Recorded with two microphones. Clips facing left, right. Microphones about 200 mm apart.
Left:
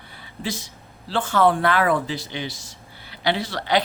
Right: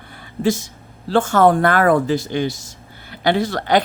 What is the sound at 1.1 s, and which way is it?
Speech, 45° right (ahead or behind).